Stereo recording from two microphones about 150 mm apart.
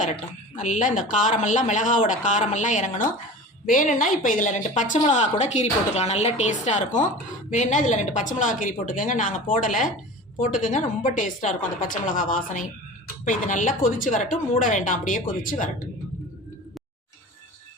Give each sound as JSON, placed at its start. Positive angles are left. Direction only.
{"t": 0.0, "sound": "a woman's voice", "side_deg": 55}